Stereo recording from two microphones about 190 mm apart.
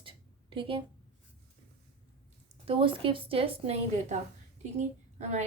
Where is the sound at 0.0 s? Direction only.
25° right (ahead or behind).